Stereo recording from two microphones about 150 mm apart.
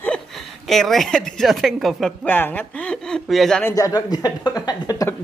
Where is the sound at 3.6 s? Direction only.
20° left (ahead or behind).